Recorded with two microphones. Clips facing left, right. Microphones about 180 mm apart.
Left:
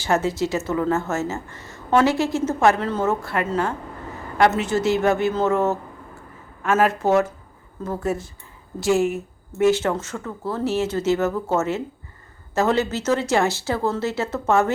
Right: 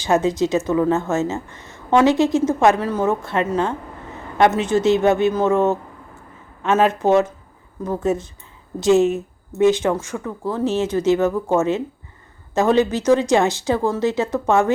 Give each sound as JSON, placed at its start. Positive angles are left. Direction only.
{"t": 0.0, "sound": "a woman's voice", "side_deg": -15}